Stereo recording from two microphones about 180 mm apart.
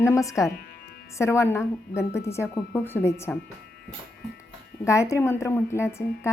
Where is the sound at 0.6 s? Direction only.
60° left (ahead or behind).